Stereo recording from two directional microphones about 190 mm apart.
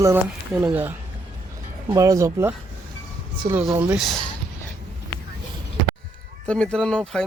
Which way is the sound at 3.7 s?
20° right (ahead or behind).